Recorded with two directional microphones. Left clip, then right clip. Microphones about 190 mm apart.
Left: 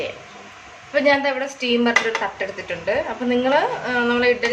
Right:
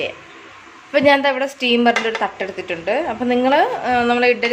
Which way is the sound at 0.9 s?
50° right (ahead or behind).